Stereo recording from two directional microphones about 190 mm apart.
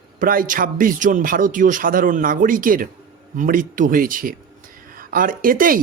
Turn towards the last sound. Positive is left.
turn(degrees=-45)  # may be behind; listen again after turning